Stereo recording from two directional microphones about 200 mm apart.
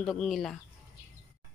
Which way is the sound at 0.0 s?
Centre (ahead or behind).